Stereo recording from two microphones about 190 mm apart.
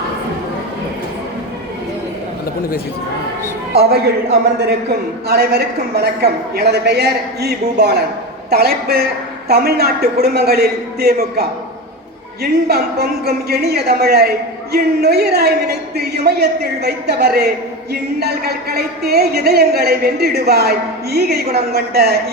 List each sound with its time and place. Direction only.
3.8 s a woman's voice: 55° right (ahead or behind)